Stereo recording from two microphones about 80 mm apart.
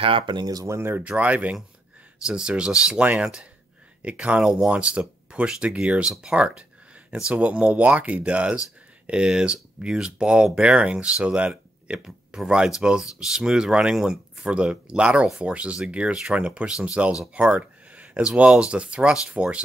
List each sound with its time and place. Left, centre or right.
0.1 s speech: right
0.5 s speech: right
0.7 s speech: right
1.0 s speech: centre